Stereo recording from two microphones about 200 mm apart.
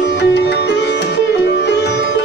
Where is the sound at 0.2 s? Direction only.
60° left (ahead or behind).